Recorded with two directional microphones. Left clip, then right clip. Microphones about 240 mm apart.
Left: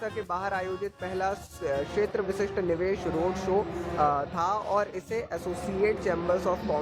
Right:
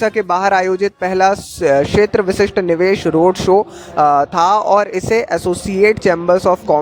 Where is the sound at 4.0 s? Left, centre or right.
Right.